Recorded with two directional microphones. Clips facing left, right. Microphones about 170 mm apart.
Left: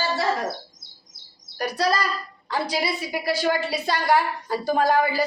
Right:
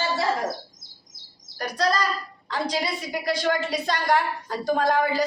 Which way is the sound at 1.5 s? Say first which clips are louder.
Left 1 dB; 10° left (ahead or behind).